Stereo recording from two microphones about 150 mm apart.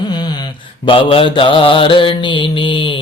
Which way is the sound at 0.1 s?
30° left (ahead or behind).